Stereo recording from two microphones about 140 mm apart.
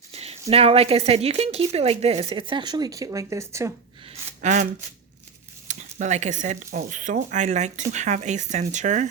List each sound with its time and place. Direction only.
0.1 s a sound: 50° right (ahead or behind)
0.5 s speech: 45° right (ahead or behind); by 3.7 s 20° right (ahead or behind)
4.4 s speech: 60° right (ahead or behind)